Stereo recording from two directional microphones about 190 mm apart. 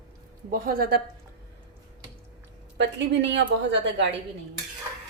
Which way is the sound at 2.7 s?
70° right (ahead or behind).